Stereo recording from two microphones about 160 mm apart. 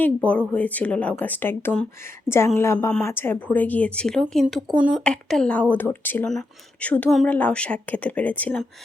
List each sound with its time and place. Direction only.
0.0 s speech: 10° left (ahead or behind)